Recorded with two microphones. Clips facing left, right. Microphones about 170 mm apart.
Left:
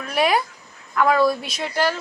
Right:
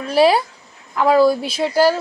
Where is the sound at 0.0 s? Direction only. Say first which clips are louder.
Right 6 dB; 30° right (ahead or behind).